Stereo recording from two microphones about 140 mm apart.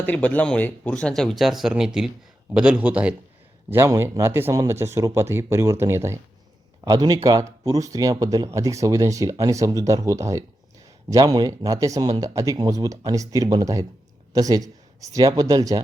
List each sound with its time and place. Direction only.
0.0 s a man's voice: 10° left (ahead or behind); by 15.8 s 25° right (ahead or behind)